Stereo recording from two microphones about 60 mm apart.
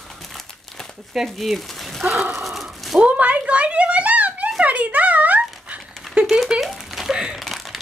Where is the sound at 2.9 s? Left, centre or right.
Right.